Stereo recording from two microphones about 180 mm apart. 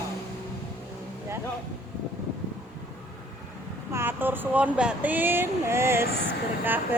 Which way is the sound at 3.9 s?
10° right (ahead or behind).